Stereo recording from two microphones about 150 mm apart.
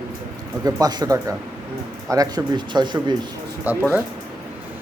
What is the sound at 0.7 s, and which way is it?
Speech, 25° right (ahead or behind).